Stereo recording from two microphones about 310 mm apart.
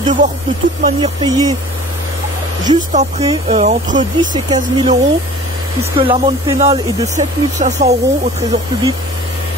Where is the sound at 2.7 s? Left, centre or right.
Right.